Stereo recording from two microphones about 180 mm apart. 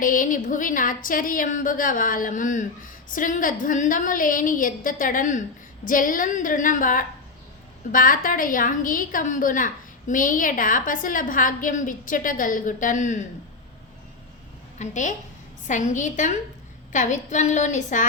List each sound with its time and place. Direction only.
0.0 s a woman's voice: 50° left (ahead or behind)
14.8 s a woman's voice: 45° left (ahead or behind)